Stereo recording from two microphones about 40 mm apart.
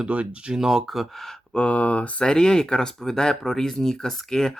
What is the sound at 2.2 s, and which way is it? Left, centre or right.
Speech, centre.